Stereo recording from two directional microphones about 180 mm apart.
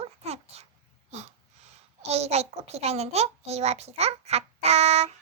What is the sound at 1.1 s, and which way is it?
A child's voice, 35° right (ahead or behind).